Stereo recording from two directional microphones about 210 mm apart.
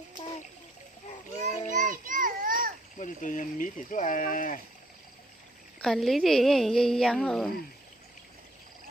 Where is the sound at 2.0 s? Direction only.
40° right (ahead or behind).